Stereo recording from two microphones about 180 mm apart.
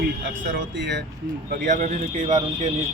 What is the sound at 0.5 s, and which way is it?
Speech, 75° right (ahead or behind).